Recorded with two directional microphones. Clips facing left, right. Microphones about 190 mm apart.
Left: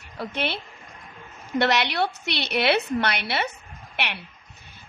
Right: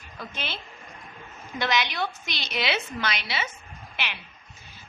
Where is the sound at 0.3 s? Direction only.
65° left (ahead or behind).